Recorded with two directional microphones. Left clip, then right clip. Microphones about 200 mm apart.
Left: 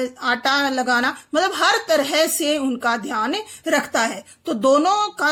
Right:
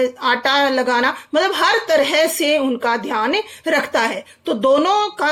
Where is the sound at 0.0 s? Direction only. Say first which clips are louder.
Right 4 dB; 15° left (ahead or behind).